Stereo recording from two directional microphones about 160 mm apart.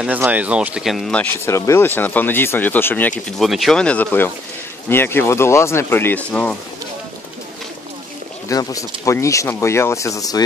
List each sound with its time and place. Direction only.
0.0 s speech: 10° right (ahead or behind); by 3.2 s 10° left (ahead or behind)
3.3 s speech: centre (ahead or behind)
8.5 s speech: 20° left (ahead or behind)